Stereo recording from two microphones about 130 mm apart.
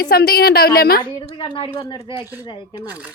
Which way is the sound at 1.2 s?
35° left (ahead or behind).